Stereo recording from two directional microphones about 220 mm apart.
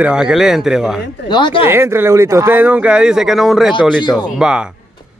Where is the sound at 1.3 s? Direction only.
20° left (ahead or behind).